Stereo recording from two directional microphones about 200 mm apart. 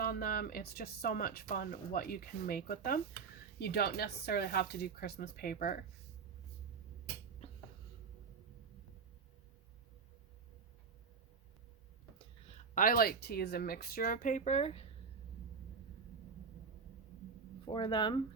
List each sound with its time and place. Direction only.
0.0 s speech: 50° left (ahead or behind)
12.7 s speech: 45° left (ahead or behind)
17.7 s speech: 25° left (ahead or behind)